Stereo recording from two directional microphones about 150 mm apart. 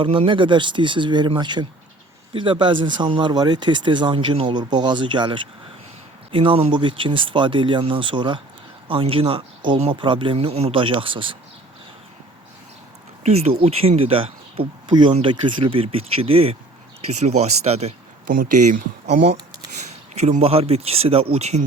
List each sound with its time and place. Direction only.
0.0 s speech: 35° right (ahead or behind)
13.2 s speech: 45° right (ahead or behind)
18.3 s speech: 65° right (ahead or behind)
19.0 s speech: 45° right (ahead or behind)